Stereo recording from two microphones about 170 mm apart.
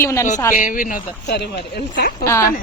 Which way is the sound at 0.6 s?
50° left (ahead or behind).